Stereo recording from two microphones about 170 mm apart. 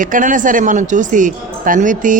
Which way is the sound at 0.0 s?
50° right (ahead or behind).